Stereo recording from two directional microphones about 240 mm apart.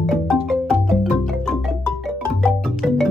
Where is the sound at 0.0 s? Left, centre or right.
Centre.